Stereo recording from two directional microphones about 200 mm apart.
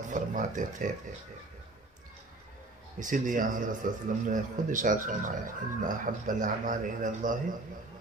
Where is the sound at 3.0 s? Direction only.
40° right (ahead or behind).